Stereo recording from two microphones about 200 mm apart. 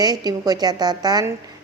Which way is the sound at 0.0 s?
20° right (ahead or behind).